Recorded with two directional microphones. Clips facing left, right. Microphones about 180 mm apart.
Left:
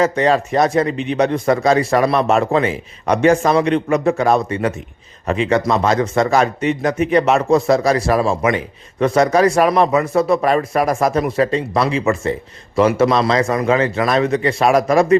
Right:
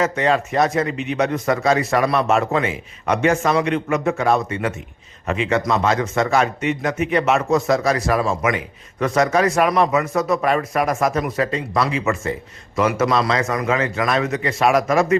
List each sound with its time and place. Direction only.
0.0 s speech: 35° left (ahead or behind)